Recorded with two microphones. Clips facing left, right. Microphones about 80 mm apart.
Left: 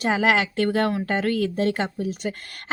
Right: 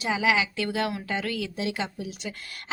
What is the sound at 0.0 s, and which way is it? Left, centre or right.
A woman's voice, left.